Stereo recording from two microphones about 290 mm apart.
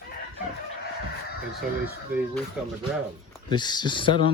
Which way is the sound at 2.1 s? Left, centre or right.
Centre.